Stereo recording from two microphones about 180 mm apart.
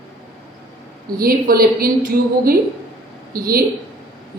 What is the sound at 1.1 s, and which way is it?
A woman's voice, 55° right (ahead or behind).